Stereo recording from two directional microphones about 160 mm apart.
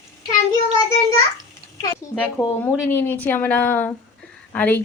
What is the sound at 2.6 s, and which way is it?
A woman's voice, 15° left (ahead or behind).